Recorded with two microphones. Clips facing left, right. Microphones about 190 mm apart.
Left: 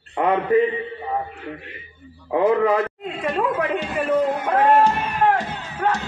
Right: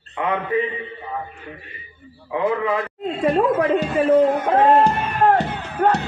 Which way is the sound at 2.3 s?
40° left (ahead or behind).